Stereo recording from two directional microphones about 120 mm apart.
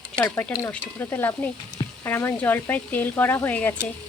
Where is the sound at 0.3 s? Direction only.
15° left (ahead or behind).